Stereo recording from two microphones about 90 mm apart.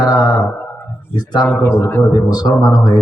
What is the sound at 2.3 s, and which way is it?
Speech, 45° left (ahead or behind).